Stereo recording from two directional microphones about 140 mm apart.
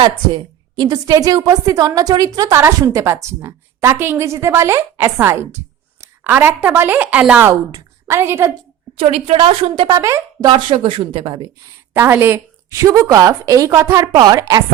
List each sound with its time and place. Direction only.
0.0 s a woman's voice: 35° right (ahead or behind); by 7.4 s 10° right (ahead or behind)
7.7 s a woman's voice: 20° right (ahead or behind)
9.0 s a woman's voice: 45° right (ahead or behind)
9.9 s a woman's voice: 20° right (ahead or behind)
10.5 s speech: 40° right (ahead or behind)
11.9 s a woman's voice: 15° right (ahead or behind)